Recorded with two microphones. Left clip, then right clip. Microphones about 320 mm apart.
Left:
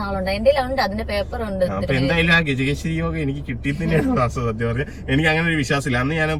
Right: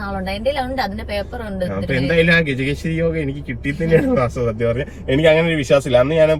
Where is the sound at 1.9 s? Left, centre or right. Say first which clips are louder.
Right 5 dB; centre.